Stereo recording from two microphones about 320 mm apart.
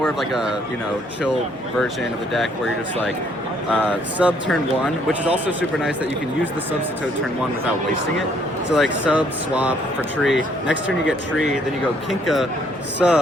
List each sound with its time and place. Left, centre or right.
0.0 s speech: centre
3.7 s speech: centre
8.7 s speech: centre
12.2 s speech: centre